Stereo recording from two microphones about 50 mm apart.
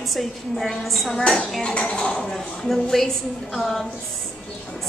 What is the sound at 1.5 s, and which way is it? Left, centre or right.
A woman's voice, centre.